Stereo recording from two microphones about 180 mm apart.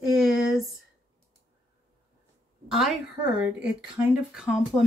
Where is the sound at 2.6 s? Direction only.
Centre (ahead or behind).